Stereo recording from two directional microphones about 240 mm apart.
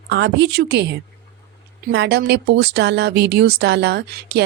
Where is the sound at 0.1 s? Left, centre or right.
Right.